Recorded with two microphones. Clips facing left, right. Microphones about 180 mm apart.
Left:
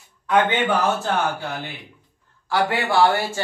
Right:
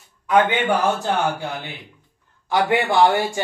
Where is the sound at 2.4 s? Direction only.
20° right (ahead or behind).